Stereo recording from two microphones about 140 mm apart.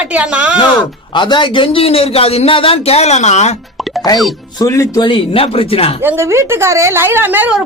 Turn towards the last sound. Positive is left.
turn(degrees=-15)  # may be behind; listen again after turning